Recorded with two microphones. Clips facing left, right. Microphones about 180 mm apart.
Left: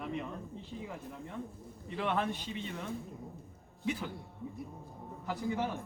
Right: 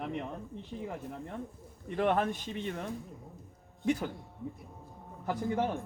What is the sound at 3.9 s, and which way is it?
Speech, 45° right (ahead or behind).